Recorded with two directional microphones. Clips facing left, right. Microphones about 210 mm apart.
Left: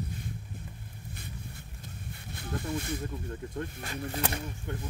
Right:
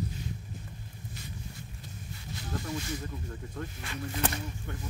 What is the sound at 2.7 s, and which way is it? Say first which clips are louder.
Snake: left 3 dB; 55° left (ahead or behind).